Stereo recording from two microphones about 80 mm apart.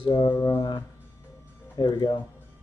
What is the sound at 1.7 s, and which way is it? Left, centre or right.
Speech, left.